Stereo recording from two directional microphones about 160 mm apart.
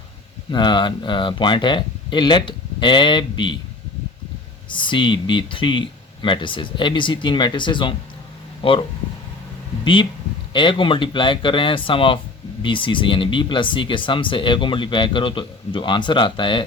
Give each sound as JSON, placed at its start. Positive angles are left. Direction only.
{"t": 0.5, "sound": "speech", "side_deg": 30}
{"t": 4.7, "sound": "speech", "side_deg": 30}
{"t": 9.8, "sound": "speech", "side_deg": 30}